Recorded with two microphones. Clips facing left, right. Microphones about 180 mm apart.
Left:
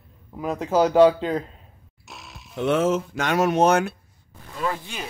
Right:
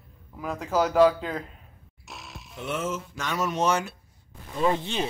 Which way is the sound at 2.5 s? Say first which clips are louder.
Left 10 dB; 75° left (ahead or behind).